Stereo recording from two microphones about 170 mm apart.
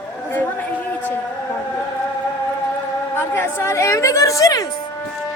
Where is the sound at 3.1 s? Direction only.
15° left (ahead or behind).